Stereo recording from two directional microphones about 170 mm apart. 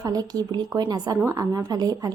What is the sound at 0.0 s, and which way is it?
A woman's voice, 20° right (ahead or behind).